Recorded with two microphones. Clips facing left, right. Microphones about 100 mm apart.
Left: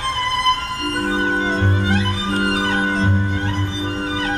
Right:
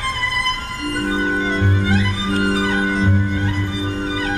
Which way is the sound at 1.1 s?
35° left (ahead or behind).